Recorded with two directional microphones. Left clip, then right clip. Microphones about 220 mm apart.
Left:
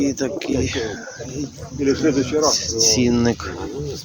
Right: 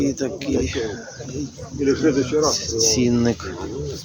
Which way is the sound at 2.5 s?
5° right (ahead or behind).